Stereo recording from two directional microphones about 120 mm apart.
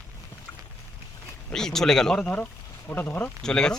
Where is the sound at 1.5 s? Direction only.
5° left (ahead or behind).